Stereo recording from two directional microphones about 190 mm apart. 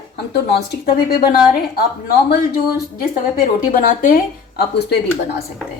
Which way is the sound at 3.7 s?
45° left (ahead or behind).